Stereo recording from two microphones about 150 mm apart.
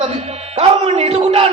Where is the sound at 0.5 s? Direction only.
40° right (ahead or behind).